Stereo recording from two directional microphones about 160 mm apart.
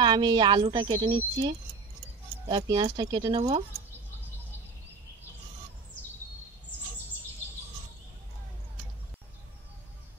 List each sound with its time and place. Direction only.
0.0 s a woman's voice: 30° right (ahead or behind)